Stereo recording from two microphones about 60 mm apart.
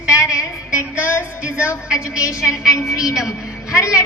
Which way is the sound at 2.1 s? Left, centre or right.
Left.